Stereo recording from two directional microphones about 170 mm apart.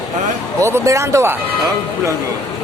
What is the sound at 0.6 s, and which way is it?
Speech, 15° right (ahead or behind).